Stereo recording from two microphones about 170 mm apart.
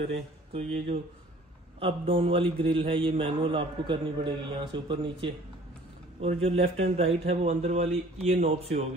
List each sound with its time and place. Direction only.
0.1 s speech: 35° right (ahead or behind)
1.8 s a man's voice: 35° right (ahead or behind)